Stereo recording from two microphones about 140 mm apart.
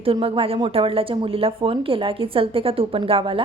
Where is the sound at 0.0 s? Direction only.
40° right (ahead or behind).